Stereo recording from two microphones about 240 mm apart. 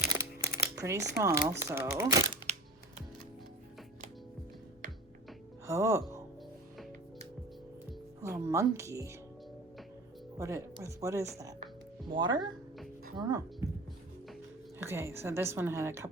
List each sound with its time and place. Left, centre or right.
0.1 s a sound: centre
1.1 s speech: centre
5.6 s speech: centre
8.4 s speech: centre
10.3 s speech: centre
14.8 s speech: centre